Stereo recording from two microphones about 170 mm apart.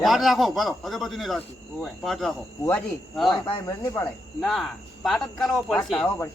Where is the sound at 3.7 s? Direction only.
15° left (ahead or behind).